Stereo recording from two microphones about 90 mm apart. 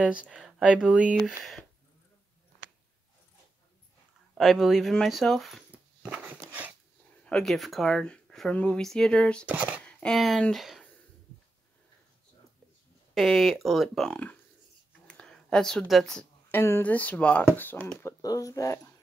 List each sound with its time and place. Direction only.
0.0 s speech: 15° right (ahead or behind)
4.4 s speech: centre (ahead or behind)
6.0 s speech: 15° right (ahead or behind)
7.2 s speech: 5° left (ahead or behind)
9.5 s speech: 15° right (ahead or behind)
9.8 s speech: 10° left (ahead or behind)
13.1 s speech: centre (ahead or behind)
14.9 s a sound: 10° left (ahead or behind)
16.4 s speech: 25° left (ahead or behind)
18.2 s speech: 40° left (ahead or behind)